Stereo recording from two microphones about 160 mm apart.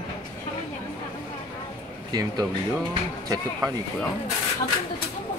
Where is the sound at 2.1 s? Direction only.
25° right (ahead or behind).